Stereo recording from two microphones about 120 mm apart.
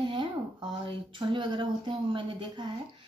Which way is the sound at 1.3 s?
40° right (ahead or behind).